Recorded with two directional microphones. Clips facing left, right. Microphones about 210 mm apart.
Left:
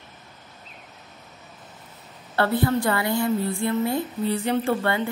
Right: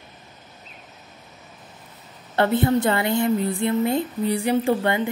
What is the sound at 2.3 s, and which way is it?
A woman's voice, 20° right (ahead or behind).